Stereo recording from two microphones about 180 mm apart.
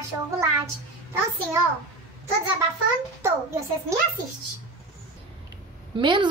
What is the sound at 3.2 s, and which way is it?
Speech, 15° right (ahead or behind).